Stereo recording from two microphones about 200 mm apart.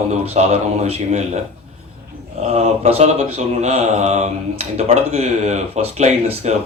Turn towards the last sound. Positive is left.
turn(degrees=-35)  # may be behind; listen again after turning